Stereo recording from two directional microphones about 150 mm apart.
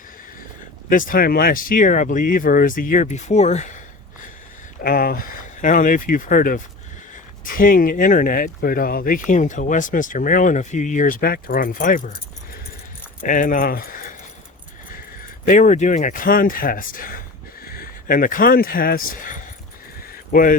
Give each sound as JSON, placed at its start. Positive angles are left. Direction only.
{"t": 0.9, "sound": "speech", "side_deg": 65}
{"t": 4.8, "sound": "speech", "side_deg": 75}
{"t": 13.2, "sound": "speech", "side_deg": 60}
{"t": 15.4, "sound": "speech", "side_deg": 60}